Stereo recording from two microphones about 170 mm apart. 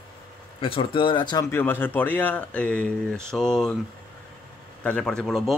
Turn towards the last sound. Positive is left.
turn(degrees=0)  # may be behind; listen again after turning